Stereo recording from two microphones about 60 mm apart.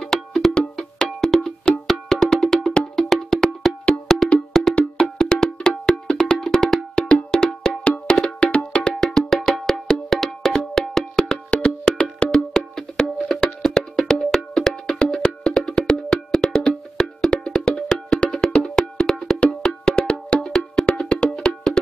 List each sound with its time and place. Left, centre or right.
0.0 s wood block: centre
15.2 s music: centre
15.9 s wood block: centre